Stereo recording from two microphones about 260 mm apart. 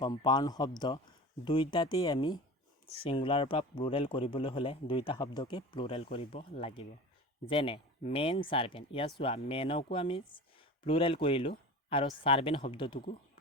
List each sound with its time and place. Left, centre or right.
0.0 s a man's voice: centre